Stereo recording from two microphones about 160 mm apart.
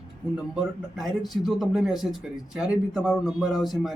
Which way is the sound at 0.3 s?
5° right (ahead or behind).